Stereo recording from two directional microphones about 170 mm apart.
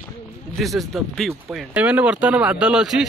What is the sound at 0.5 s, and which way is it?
Speech, centre (ahead or behind).